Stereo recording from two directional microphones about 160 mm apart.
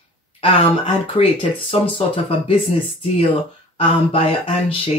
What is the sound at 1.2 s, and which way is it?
Speech, 35° left (ahead or behind).